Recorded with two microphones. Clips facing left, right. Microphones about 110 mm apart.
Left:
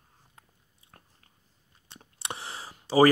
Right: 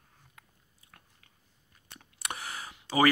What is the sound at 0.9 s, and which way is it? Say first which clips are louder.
Biting: left 2 dB; 35° left (ahead or behind).